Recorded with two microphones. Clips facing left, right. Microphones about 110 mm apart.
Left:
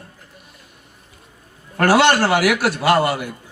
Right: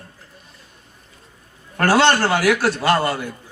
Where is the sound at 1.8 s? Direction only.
30° right (ahead or behind).